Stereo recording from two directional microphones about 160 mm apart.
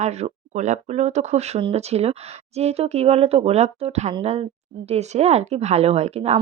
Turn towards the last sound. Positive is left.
turn(degrees=-40)  # may be behind; listen again after turning